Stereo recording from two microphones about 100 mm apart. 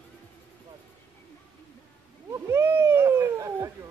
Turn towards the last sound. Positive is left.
turn(degrees=-30)  # may be behind; listen again after turning